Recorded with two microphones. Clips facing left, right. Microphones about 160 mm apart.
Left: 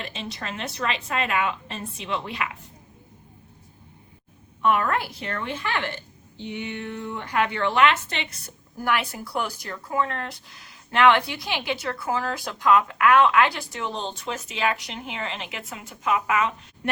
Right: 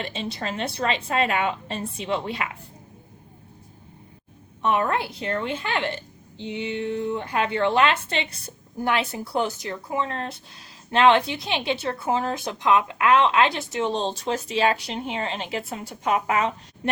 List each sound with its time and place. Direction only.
0.0 s a woman's voice: 30° right (ahead or behind)
4.6 s a woman's voice: 25° right (ahead or behind)